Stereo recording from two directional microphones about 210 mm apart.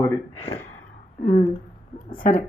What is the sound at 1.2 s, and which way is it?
Speech, 35° left (ahead or behind).